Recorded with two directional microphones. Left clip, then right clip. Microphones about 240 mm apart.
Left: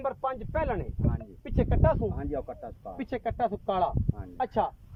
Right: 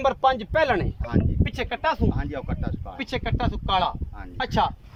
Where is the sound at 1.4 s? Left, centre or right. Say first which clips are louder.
Left 1 dB; left.